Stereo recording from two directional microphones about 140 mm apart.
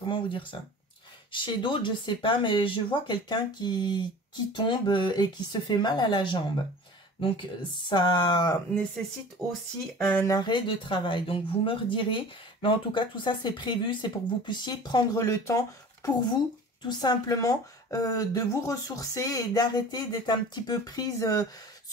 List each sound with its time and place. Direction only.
0.0 s speech: 35° left (ahead or behind)
9.4 s speech: centre (ahead or behind)
10.2 s speech: 30° left (ahead or behind)